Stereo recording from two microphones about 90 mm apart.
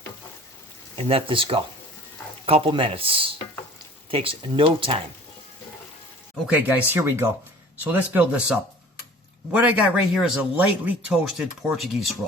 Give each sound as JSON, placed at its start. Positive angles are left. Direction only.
{"t": 0.9, "sound": "speech", "side_deg": -85}
{"t": 6.5, "sound": "speech", "side_deg": -20}
{"t": 10.2, "sound": "speech", "side_deg": -5}
{"t": 10.6, "sound": "speech", "side_deg": -20}
{"t": 11.1, "sound": "speech", "side_deg": -5}